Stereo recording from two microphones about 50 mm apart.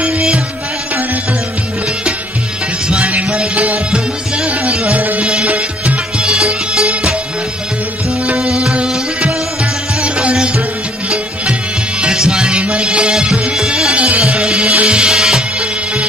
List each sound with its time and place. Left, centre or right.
3.1 s music: right
5.2 s music: centre
5.5 s music: right
6.2 s music: centre
8.4 s music: centre
12.0 s music: centre
13.1 s music: centre
13.9 s music: right